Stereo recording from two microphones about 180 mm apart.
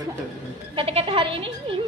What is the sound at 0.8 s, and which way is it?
A woman's voice, 30° right (ahead or behind).